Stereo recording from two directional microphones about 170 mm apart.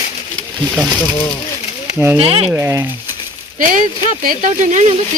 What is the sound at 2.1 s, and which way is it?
Speech, 35° right (ahead or behind).